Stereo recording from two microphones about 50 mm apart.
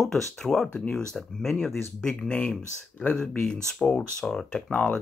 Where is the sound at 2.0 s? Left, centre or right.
Centre.